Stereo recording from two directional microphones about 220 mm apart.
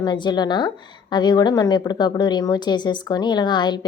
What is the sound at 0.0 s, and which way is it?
A woman's voice, 20° left (ahead or behind).